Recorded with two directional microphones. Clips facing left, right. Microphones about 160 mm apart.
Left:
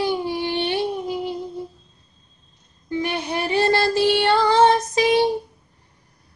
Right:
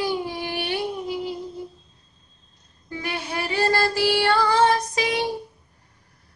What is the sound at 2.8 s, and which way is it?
Music, 20° left (ahead or behind).